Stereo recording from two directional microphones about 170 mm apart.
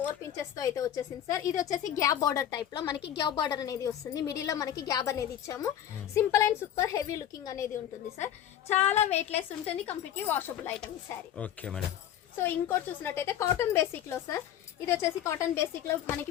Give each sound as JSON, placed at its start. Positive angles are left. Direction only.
{"t": 0.3, "sound": "a woman's voice", "side_deg": 20}
{"t": 8.7, "sound": "a woman's voice", "side_deg": 40}
{"t": 10.2, "sound": "a woman's voice", "side_deg": 10}